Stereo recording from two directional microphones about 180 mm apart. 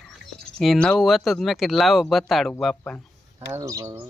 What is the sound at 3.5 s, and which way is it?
Speech, 15° right (ahead or behind).